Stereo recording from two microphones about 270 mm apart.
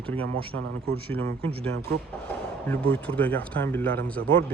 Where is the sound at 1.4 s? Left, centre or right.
Right.